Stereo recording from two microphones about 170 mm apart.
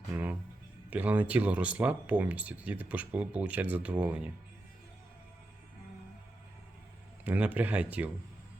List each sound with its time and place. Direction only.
0.1 s music: 10° right (ahead or behind)
0.9 s speech: 10° right (ahead or behind)
7.3 s speech: 10° right (ahead or behind)